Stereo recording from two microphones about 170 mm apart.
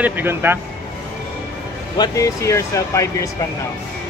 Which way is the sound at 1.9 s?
20° left (ahead or behind).